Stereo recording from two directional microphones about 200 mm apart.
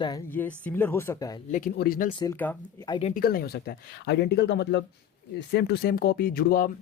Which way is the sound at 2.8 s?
20° left (ahead or behind).